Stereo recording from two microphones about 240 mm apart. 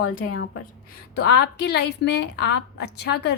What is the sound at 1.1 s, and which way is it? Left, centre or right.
A woman's voice, left.